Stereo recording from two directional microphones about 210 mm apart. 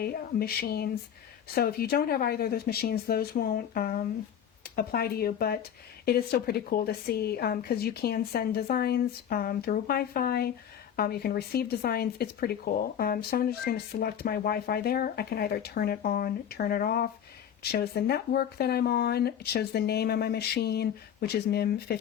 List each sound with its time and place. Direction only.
0.0 s speech: 45° left (ahead or behind)